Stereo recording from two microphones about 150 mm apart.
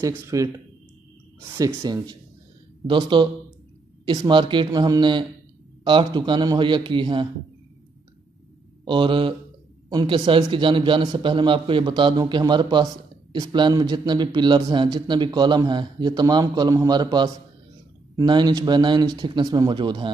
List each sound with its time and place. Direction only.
0.0 s a man's voice: 20° right (ahead or behind)
1.5 s speech: 20° right (ahead or behind)
1.8 s a man's voice: 30° right (ahead or behind)
8.8 s a man's voice: 35° right (ahead or behind)